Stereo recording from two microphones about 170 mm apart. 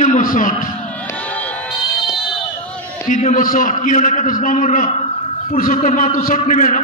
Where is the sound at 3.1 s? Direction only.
45° left (ahead or behind).